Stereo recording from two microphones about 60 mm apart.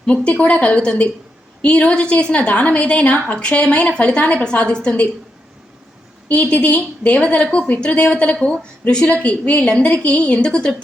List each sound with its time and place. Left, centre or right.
0.0 s a woman's voice: centre
6.2 s a woman's voice: left